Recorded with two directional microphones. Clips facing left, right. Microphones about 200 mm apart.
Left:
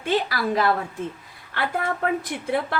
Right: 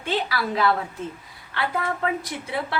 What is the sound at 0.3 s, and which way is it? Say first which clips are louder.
A woman's voice: left 1 dB; 45° left (ahead or behind).